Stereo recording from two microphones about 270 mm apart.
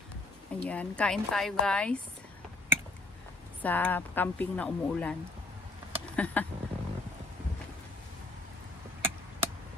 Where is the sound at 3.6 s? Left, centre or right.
Centre.